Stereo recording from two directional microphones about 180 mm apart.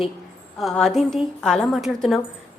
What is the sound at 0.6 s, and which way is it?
A woman's voice, centre (ahead or behind).